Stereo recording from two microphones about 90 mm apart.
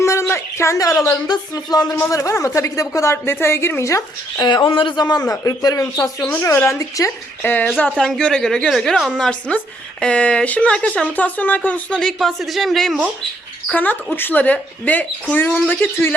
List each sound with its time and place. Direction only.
0.0 s a sound: 30° left (ahead or behind)
0.3 s a woman's voice: 30° left (ahead or behind); by 1.9 s 50° left (ahead or behind)
2.0 s a woman's voice: 35° left (ahead or behind)
4.4 s a man's voice: 60° left (ahead or behind); by 6.2 s 40° left (ahead or behind)
6.2 s speech: 20° left (ahead or behind)
6.6 s a woman's voice: 35° left (ahead or behind)
7.4 s speech: 20° left (ahead or behind); by 13.0 s centre (ahead or behind)
14.2 s speech: 20° left (ahead or behind)